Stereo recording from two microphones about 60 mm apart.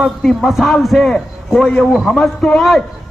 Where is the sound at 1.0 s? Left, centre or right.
Centre.